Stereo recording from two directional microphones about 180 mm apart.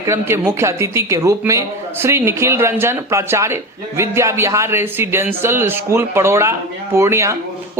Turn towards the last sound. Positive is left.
turn(degrees=-15)  # may be behind; listen again after turning